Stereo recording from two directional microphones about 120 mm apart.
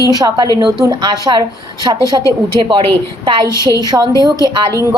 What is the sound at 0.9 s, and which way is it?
A woman's voice, 35° right (ahead or behind).